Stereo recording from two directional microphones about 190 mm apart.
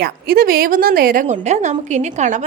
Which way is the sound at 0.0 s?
50° right (ahead or behind).